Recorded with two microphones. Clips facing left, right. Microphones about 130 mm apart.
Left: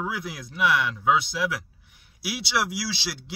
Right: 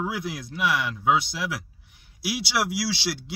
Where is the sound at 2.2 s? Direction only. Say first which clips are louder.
Right 1 dB; centre (ahead or behind).